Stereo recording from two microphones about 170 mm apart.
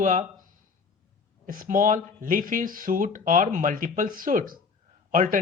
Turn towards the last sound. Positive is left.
turn(degrees=-50)  # may be behind; listen again after turning